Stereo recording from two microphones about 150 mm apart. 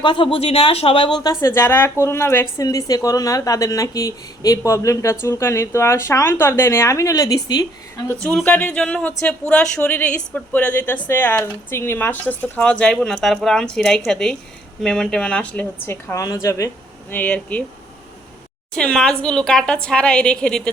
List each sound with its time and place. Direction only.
0.0 s speech: 35° left (ahead or behind)
1.2 s a woman's voice: 20° left (ahead or behind)
8.2 s a woman's voice: 5° left (ahead or behind)
18.7 s a woman's voice: 5° left (ahead or behind)